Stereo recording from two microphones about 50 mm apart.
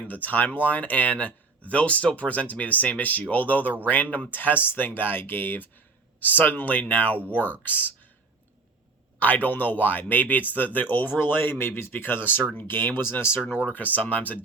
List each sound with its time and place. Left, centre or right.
0.1 s speech: left
9.1 s speech: left
13.7 s speech: left